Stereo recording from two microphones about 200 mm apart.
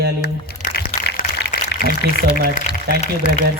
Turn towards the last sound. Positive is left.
turn(degrees=35)  # may be behind; listen again after turning